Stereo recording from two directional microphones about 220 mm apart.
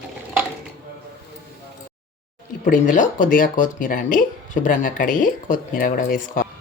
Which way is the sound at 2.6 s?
35° left (ahead or behind).